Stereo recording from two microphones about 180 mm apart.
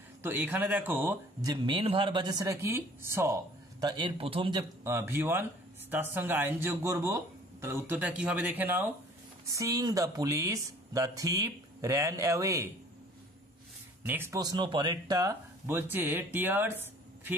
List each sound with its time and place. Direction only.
0.2 s speech: 10° right (ahead or behind)
1.5 s speech: 30° right (ahead or behind)
4.9 s speech: 10° right (ahead or behind)
14.0 s speech: 10° right (ahead or behind)